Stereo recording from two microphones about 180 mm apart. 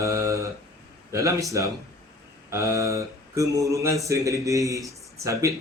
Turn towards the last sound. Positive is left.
turn(degrees=-15)  # may be behind; listen again after turning